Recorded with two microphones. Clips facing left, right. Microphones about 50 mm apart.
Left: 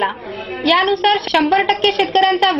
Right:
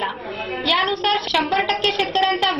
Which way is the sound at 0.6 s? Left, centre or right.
Left.